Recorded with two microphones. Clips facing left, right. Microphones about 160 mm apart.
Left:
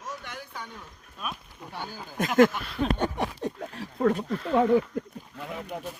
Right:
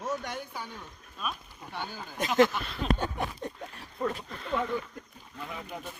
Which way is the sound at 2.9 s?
65° left (ahead or behind).